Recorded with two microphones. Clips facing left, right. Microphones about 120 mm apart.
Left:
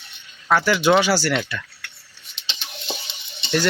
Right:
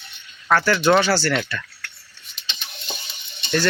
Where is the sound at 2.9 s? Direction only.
25° left (ahead or behind).